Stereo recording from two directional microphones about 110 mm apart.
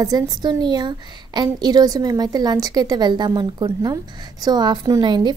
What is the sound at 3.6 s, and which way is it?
A woman's voice, 30° right (ahead or behind).